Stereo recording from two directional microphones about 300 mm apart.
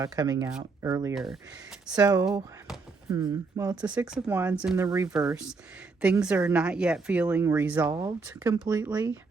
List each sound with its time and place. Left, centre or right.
0.0 s speech: centre
1.1 s a woman's voice: centre